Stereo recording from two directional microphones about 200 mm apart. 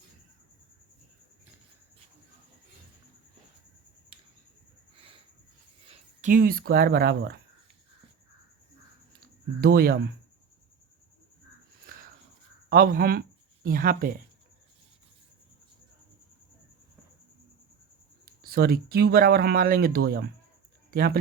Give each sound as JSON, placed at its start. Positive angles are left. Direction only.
{"t": 5.9, "sound": "speech", "side_deg": -40}
{"t": 9.6, "sound": "speech", "side_deg": -50}
{"t": 12.7, "sound": "speech", "side_deg": -45}
{"t": 18.4, "sound": "speech", "side_deg": -50}